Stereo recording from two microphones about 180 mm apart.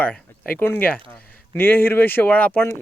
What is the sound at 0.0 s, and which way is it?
Speech, 10° left (ahead or behind).